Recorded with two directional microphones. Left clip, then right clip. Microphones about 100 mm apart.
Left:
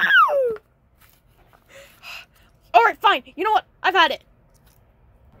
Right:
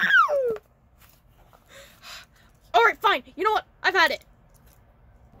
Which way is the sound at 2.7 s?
20° left (ahead or behind).